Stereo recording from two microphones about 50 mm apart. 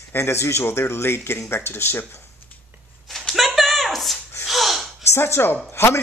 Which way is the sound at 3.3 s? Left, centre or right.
Centre.